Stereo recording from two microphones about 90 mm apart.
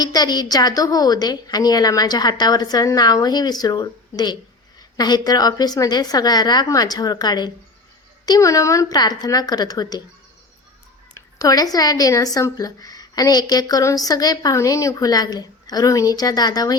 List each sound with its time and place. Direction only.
0.0 s speech: 45° left (ahead or behind)
8.3 s speech: 35° left (ahead or behind)
9.0 s speech: 45° left (ahead or behind)
11.1 s speech: 40° left (ahead or behind)